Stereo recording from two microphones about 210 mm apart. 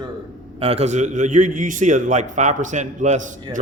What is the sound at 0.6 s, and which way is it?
A man's voice, 30° right (ahead or behind).